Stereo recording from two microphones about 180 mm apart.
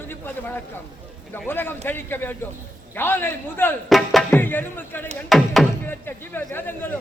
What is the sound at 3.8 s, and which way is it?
A man's voice, centre (ahead or behind).